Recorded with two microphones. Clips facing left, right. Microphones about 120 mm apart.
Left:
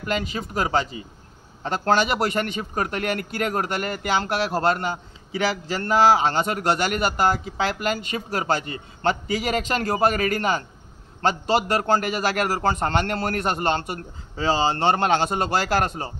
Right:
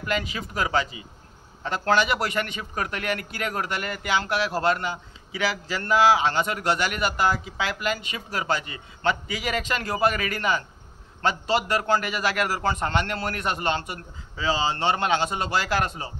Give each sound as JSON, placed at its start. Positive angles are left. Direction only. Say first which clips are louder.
{"t": 0.0, "sound": "a man's voice", "louder": "left 2 dB", "side_deg": 35}